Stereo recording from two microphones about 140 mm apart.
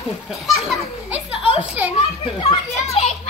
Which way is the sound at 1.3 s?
40° left (ahead or behind).